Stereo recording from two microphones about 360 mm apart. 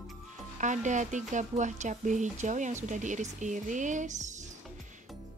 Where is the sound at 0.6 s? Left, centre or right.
Centre.